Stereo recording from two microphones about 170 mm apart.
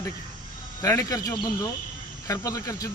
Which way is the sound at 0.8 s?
20° left (ahead or behind).